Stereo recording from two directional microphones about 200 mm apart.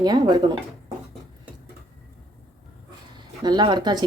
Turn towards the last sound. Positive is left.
turn(degrees=-20)  # may be behind; listen again after turning